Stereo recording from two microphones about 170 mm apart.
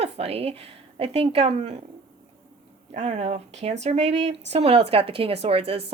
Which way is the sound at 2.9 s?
40° right (ahead or behind).